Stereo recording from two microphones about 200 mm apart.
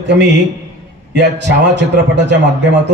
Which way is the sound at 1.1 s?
60° right (ahead or behind).